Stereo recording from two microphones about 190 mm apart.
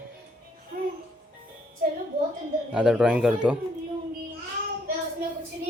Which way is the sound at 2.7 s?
5° right (ahead or behind).